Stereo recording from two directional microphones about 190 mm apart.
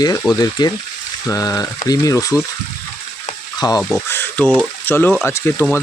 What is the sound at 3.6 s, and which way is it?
Speech, 20° left (ahead or behind).